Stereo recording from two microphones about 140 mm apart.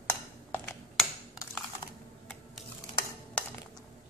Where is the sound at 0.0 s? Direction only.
10° left (ahead or behind).